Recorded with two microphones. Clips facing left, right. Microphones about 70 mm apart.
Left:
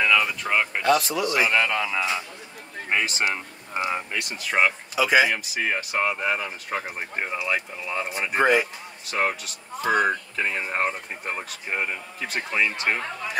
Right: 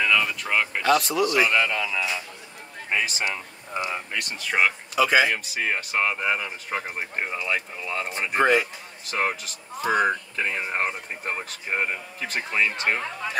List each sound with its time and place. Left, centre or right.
0.1 s speech: centre
1.5 s a man's voice: left
4.2 s speech: centre